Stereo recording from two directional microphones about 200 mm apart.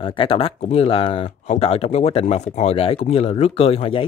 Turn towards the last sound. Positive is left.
turn(degrees=30)  # may be behind; listen again after turning